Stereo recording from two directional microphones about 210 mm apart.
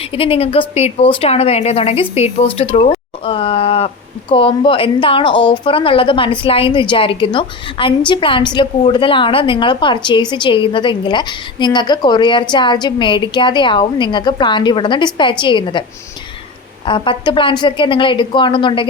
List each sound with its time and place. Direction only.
0.0 s a woman's voice: 25° left (ahead or behind)
16.8 s a woman's voice: 25° left (ahead or behind)